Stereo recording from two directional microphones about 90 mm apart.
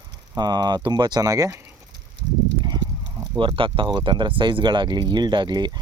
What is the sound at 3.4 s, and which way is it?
Speech, 70° right (ahead or behind).